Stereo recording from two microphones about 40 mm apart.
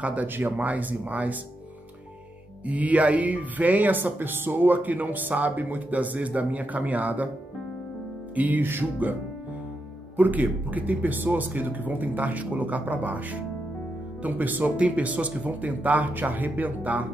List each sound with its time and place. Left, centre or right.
0.0 s speech: right
2.6 s speech: right
8.4 s speech: right